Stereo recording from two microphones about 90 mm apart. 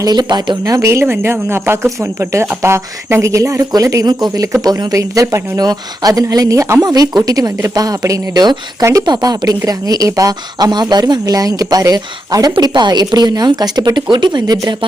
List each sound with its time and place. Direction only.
0.0 s speech: 50° right (ahead or behind)
9.0 s a woman's voice: 50° right (ahead or behind)